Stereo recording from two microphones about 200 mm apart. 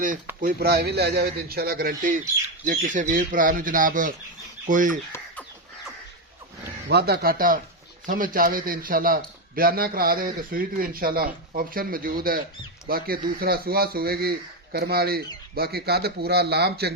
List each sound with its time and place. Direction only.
0.4 s a man's voice: 50° right (ahead or behind)
6.8 s a man's voice: 55° right (ahead or behind)